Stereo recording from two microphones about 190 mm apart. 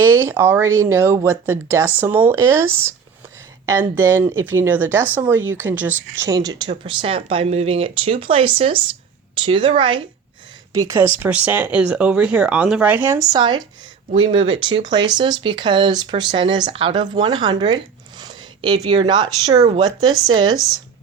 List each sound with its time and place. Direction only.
0.3 s speech: 10° right (ahead or behind)
3.7 s speech: 10° right (ahead or behind)
18.2 s a sound: 25° right (ahead or behind)
18.9 s speech: 25° right (ahead or behind)